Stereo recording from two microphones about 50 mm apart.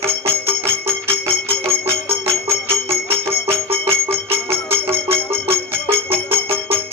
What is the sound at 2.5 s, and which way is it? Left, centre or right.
Bicycle bell, centre.